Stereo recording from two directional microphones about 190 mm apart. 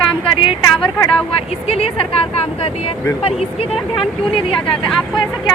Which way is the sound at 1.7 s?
30° left (ahead or behind).